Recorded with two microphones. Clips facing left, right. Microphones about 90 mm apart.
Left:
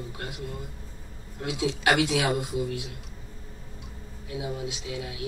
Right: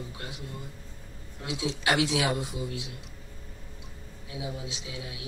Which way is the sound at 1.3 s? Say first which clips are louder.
Left 4 dB; 55° left (ahead or behind).